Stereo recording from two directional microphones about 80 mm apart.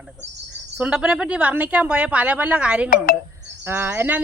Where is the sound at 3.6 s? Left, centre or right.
Right.